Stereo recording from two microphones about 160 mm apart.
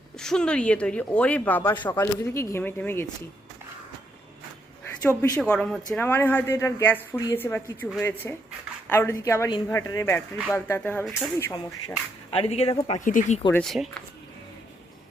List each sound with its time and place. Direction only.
0.2 s speech: 5° left (ahead or behind)
5.0 s speech: 20° left (ahead or behind)
5.4 s speech: 5° left (ahead or behind)
12.3 s speech: 40° left (ahead or behind)
13.1 s speech: 50° left (ahead or behind)
13.5 s speech: 5° left (ahead or behind)